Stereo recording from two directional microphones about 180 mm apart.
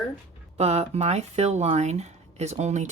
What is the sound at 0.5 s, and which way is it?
Speech, 35° right (ahead or behind).